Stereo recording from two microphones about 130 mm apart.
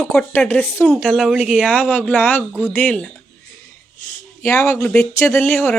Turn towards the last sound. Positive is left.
turn(degrees=20)  # may be behind; listen again after turning